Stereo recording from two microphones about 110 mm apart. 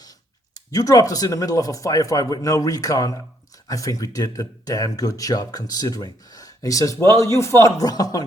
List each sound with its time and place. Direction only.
0.5 s speech: 35° left (ahead or behind)